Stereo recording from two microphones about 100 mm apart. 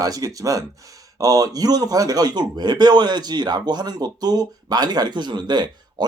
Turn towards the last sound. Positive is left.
turn(degrees=-45)  # may be behind; listen again after turning